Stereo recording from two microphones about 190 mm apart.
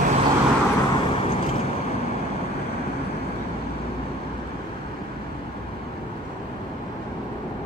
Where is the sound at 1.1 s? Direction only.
30° left (ahead or behind).